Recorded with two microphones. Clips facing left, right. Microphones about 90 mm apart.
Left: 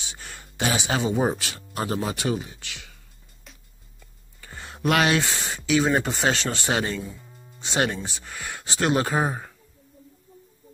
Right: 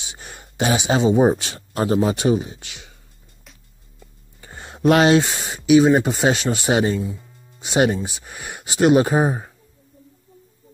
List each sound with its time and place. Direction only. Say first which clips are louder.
0.1 s a sound: right 2 dB; 20° right (ahead or behind)
1.4 s speech: right 6 dB; 25° right (ahead or behind)
3.5 s music: even; centre (ahead or behind)
4.0 s a sound: right 4 dB; 25° right (ahead or behind)
5.7 s speech: right 8 dB; 20° right (ahead or behind)
7.0 s speech: right 7 dB; 10° right (ahead or behind)